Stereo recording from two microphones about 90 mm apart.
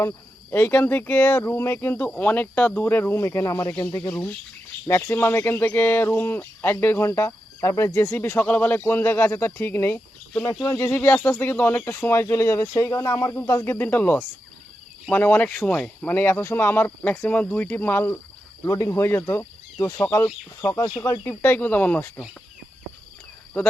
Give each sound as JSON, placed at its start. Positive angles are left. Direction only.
{"t": 0.5, "sound": "speech", "side_deg": 15}
{"t": 7.9, "sound": "speech", "side_deg": 25}
{"t": 13.1, "sound": "speech", "side_deg": 45}
{"t": 13.3, "sound": "speech", "side_deg": 30}
{"t": 18.6, "sound": "speech", "side_deg": 40}
{"t": 21.0, "sound": "speech", "side_deg": 30}